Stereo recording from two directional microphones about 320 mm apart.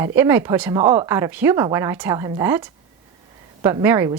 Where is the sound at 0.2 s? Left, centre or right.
Centre.